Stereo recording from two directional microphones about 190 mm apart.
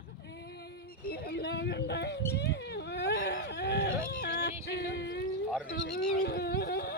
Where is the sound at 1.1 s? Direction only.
55° left (ahead or behind).